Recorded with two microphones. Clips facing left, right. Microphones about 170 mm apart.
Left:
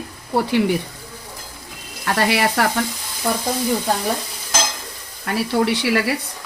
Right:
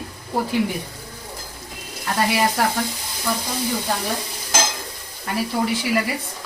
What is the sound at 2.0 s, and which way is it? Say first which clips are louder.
Speech: left 2 dB; 75° left (ahead or behind).